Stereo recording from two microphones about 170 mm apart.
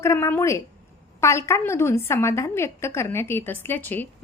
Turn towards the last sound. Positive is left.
turn(degrees=10)  # may be behind; listen again after turning